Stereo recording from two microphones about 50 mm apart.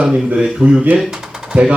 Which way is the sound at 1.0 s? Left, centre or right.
Centre.